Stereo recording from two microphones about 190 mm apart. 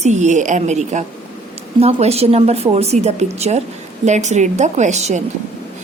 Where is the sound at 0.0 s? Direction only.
40° right (ahead or behind).